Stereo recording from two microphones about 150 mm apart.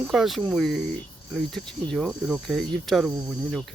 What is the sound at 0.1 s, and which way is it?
Speech, centre (ahead or behind).